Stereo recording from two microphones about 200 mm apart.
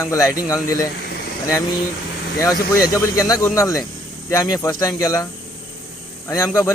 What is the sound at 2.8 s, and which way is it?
Speech, 15° left (ahead or behind).